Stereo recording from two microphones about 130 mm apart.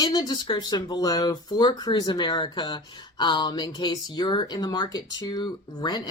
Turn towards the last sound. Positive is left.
turn(degrees=35)  # may be behind; listen again after turning